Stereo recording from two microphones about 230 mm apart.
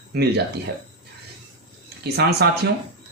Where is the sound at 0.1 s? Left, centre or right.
Right.